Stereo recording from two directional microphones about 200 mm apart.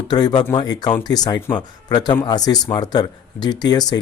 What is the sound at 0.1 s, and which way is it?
Speech, 20° left (ahead or behind).